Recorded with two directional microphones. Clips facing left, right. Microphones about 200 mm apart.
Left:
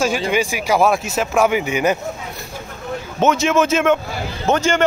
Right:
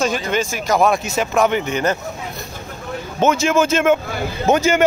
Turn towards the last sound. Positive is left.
turn(degrees=-10)  # may be behind; listen again after turning